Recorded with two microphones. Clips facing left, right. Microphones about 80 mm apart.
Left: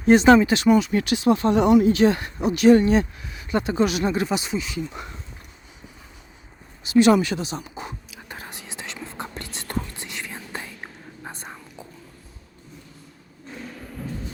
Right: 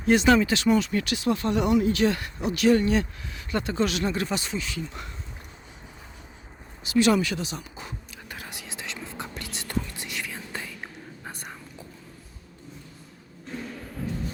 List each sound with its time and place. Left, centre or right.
0.0 s speech: left
0.7 s speech: centre
0.9 s speech: left
6.9 s speech: left
8.3 s whispering: left